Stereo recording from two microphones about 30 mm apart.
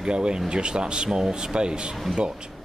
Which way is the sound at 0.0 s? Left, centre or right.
Right.